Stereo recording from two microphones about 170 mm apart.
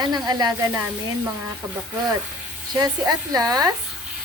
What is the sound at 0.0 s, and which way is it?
Speech, 25° right (ahead or behind).